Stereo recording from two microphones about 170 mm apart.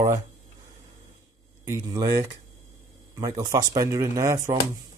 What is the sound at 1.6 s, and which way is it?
Speech, 20° right (ahead or behind).